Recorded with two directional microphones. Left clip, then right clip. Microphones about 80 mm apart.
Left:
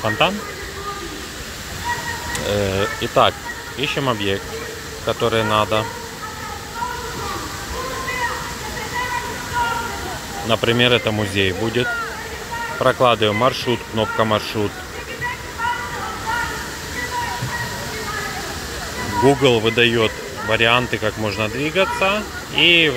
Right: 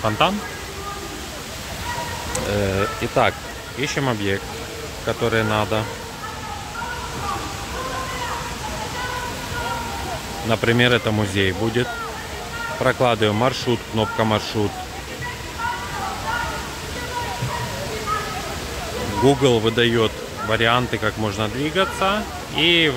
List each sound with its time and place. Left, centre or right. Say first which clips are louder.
0.2 s speech: left 1 dB; right
2.5 s speech: left 2 dB; centre
4.0 s speech: left 1 dB; right
10.5 s speech: left 2 dB; right
19.2 s speech: left 2 dB; right